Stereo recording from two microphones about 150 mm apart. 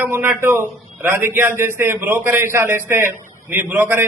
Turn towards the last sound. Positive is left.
turn(degrees=-15)  # may be behind; listen again after turning